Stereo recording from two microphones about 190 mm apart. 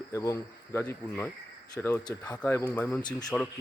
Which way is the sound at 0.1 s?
15° left (ahead or behind).